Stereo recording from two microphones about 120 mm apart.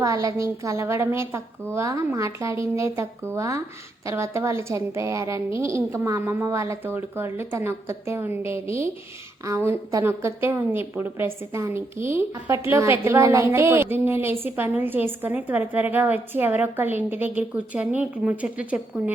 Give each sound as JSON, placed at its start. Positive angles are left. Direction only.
{"t": 0.0, "sound": "a woman's voice", "side_deg": -30}